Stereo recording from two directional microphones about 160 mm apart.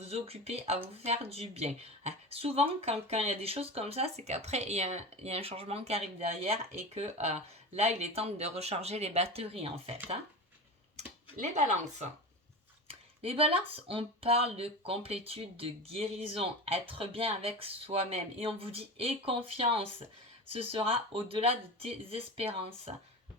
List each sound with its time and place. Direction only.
0.0 s speech: 40° right (ahead or behind)
11.6 s speech: 45° right (ahead or behind)
12.9 s speech: 35° right (ahead or behind)